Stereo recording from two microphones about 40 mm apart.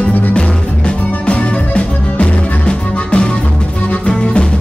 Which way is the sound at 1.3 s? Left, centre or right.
Left.